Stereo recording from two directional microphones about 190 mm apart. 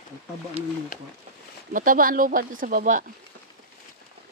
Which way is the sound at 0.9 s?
45° left (ahead or behind).